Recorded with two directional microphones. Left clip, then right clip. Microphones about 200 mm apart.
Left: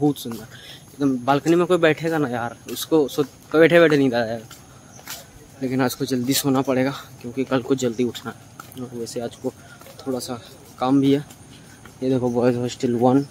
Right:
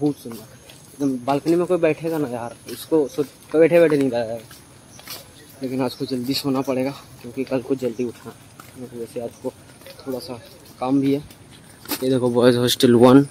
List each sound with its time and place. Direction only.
0.9 s speech: 10° left (ahead or behind)
5.6 s speech: 5° left (ahead or behind)
12.0 s speech: 5° right (ahead or behind)
12.3 s speech: 20° right (ahead or behind)